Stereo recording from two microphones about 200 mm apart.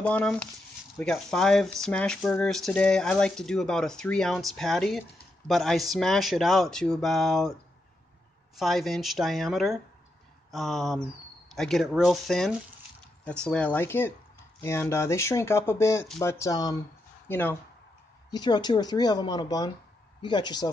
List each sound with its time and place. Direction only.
0.0 s speech: 5° left (ahead or behind)
8.5 s speech: centre (ahead or behind)
18.3 s speech: 20° left (ahead or behind)